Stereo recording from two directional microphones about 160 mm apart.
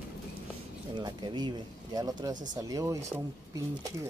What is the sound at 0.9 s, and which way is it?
Speech, 25° right (ahead or behind).